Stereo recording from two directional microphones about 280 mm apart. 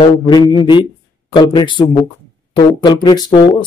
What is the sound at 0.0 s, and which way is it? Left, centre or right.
A man's voice, centre.